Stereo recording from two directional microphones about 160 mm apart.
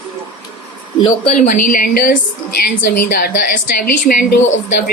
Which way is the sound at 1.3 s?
55° left (ahead or behind).